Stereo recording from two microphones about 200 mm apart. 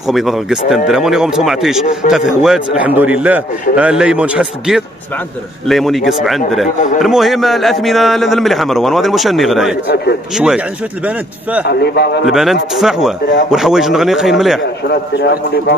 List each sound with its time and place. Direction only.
0.1 s a man's voice: centre (ahead or behind)
11.6 s speech: 55° left (ahead or behind)
12.3 s a man's voice: centre (ahead or behind)
14.9 s speech: 55° left (ahead or behind)